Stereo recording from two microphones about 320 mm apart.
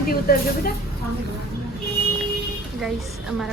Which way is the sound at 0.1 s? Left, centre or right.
Left.